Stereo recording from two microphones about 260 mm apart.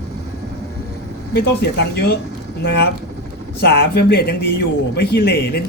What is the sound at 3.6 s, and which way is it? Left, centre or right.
Speech, left.